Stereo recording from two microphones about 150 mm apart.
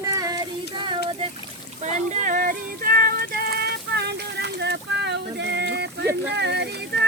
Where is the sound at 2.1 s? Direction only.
60° right (ahead or behind); by 4.6 s 90° right.